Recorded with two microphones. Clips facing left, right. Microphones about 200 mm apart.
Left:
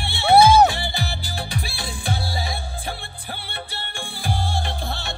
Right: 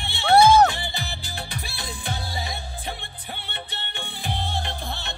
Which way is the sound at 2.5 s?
10° left (ahead or behind).